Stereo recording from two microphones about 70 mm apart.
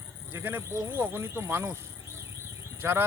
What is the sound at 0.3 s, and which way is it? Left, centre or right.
Speech, right.